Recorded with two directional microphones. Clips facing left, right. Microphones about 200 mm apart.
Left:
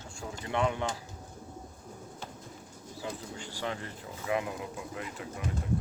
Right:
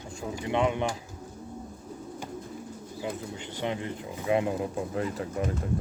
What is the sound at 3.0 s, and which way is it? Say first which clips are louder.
Speech: right 4 dB; 20° right (ahead or behind).